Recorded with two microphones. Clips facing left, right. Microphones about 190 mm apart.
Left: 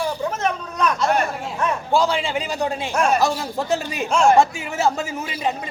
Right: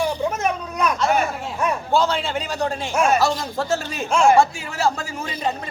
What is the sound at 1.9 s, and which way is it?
A man's voice, 10° left (ahead or behind).